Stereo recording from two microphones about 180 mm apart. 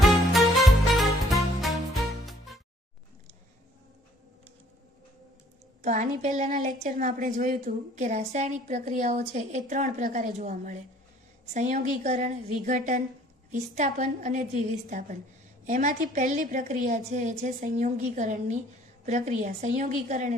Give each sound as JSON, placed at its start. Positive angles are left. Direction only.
{"t": 0.3, "sound": "music", "side_deg": 0}
{"t": 5.8, "sound": "a woman's voice", "side_deg": -45}